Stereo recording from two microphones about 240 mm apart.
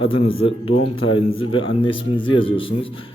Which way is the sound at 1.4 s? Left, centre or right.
Left.